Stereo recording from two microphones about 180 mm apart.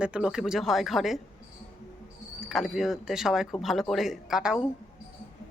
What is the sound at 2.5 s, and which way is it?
Speech, centre (ahead or behind).